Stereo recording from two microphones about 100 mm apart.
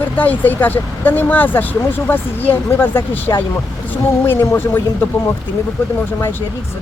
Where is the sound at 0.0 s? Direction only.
20° left (ahead or behind).